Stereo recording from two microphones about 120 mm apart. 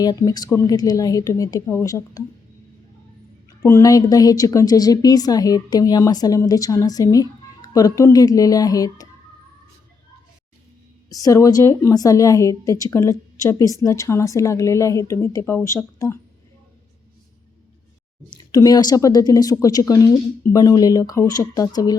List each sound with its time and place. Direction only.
0.0 s a woman's voice: 30° left (ahead or behind)
3.6 s a woman's voice: 25° left (ahead or behind)
11.1 s a woman's voice: 30° left (ahead or behind)
18.5 s a woman's voice: 30° left (ahead or behind)